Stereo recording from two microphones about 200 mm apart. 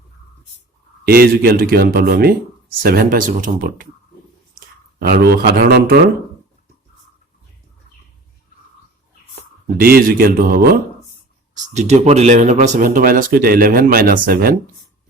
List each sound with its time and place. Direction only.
1.0 s speech: 50° right (ahead or behind)
9.7 s speech: 45° right (ahead or behind)
11.5 s speech: 35° right (ahead or behind)